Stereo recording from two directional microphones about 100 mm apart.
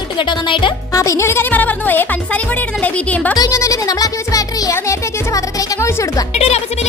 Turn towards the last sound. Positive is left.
turn(degrees=90)